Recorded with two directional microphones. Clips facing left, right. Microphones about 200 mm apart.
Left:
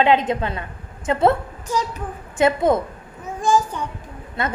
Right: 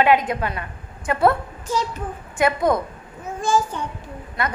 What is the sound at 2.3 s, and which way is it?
Speech, 25° left (ahead or behind).